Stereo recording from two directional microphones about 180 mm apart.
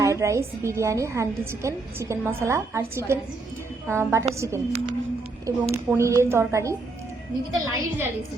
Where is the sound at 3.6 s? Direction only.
15° right (ahead or behind).